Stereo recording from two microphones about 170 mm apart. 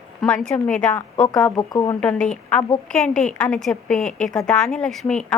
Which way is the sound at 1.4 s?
20° left (ahead or behind).